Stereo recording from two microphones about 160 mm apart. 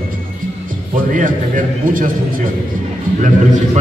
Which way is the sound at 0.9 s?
55° right (ahead or behind).